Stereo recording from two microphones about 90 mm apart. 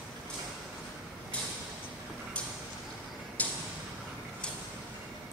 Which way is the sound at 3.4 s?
15° left (ahead or behind).